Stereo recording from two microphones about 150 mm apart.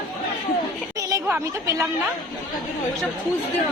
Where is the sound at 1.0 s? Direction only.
20° right (ahead or behind).